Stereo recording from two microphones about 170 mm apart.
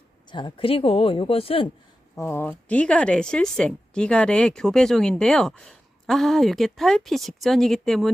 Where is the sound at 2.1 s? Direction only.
15° left (ahead or behind).